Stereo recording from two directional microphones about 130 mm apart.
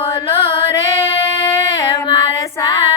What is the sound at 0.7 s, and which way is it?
Female singing, 20° left (ahead or behind).